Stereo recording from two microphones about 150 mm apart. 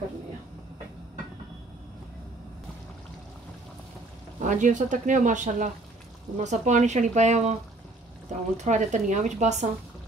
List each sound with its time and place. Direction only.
4.4 s speech: 60° right (ahead or behind)
8.6 s speech: 55° right (ahead or behind)